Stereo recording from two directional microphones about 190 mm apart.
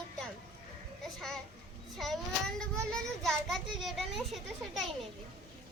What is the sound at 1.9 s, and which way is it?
A child's voice, centre (ahead or behind).